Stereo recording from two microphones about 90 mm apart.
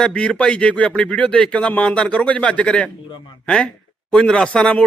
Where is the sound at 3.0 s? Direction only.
60° left (ahead or behind).